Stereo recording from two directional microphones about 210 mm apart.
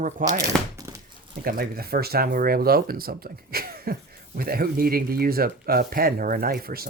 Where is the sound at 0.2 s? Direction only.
40° right (ahead or behind).